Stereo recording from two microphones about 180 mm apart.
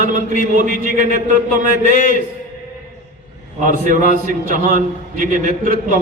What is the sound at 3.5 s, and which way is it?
A man's voice, 45° right (ahead or behind).